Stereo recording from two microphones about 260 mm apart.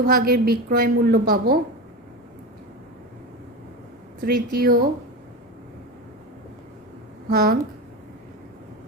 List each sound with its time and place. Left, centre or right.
0.0 s a woman's voice: right
4.2 s a woman's voice: right
7.3 s a woman's voice: right